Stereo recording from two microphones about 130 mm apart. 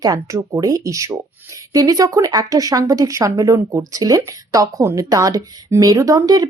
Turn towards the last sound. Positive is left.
turn(degrees=-25)  # may be behind; listen again after turning